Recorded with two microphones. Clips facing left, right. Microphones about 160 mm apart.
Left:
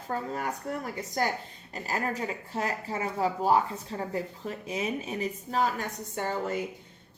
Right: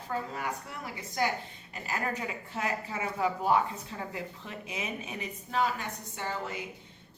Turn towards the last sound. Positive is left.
turn(degrees=45)  # may be behind; listen again after turning